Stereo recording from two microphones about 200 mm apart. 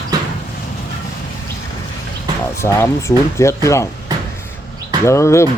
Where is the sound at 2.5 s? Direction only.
15° left (ahead or behind).